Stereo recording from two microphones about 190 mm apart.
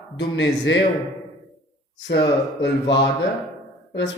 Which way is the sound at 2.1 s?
65° left (ahead or behind).